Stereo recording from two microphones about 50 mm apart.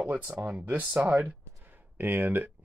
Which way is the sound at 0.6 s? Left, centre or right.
Right.